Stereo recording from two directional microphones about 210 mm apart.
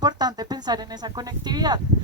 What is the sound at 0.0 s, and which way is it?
Speech, 20° right (ahead or behind).